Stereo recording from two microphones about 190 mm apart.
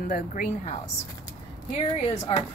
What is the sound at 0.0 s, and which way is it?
Speech, 45° left (ahead or behind).